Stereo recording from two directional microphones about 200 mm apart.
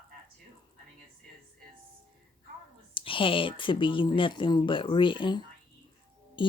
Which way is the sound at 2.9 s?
25° left (ahead or behind).